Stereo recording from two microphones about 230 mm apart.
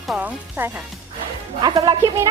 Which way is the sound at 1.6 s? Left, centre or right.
Centre.